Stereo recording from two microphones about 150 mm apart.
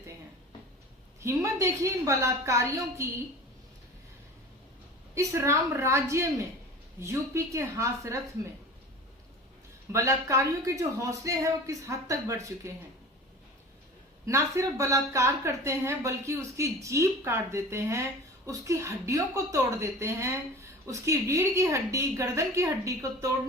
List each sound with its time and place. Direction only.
1.2 s speech: 20° right (ahead or behind)
5.1 s a woman's voice: 20° right (ahead or behind)
9.9 s speech: 20° right (ahead or behind)
14.3 s speech: 20° right (ahead or behind)